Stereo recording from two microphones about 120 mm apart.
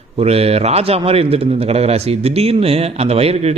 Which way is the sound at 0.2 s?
55° right (ahead or behind).